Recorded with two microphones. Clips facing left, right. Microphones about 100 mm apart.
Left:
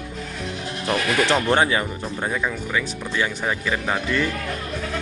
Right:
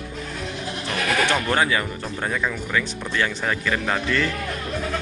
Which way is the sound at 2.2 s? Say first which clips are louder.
Even; 15° left (ahead or behind).